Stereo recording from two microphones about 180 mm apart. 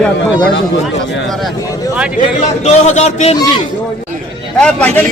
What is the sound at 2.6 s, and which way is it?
Speech, 40° left (ahead or behind).